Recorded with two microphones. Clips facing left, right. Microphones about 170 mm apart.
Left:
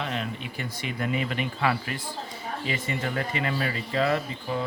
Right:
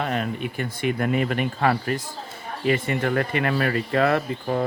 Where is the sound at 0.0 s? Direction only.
50° right (ahead or behind).